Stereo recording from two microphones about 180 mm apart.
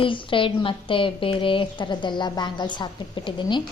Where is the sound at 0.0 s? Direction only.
30° left (ahead or behind).